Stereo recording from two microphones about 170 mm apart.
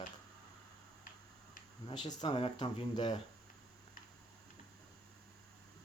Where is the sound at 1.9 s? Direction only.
30° left (ahead or behind).